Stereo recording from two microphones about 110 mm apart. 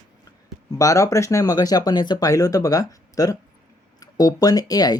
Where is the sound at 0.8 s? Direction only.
30° left (ahead or behind).